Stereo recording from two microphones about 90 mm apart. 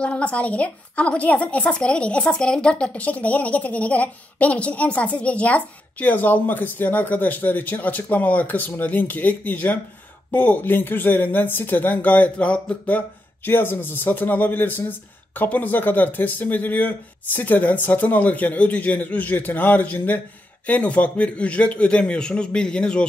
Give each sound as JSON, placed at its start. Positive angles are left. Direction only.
{"t": 0.0, "sound": "a woman's voice", "side_deg": 15}